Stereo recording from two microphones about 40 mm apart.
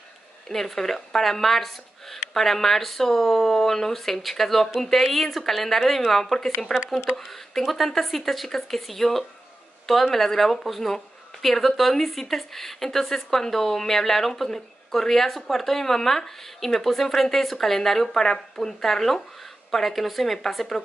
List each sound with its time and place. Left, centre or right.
0.5 s a woman's voice: centre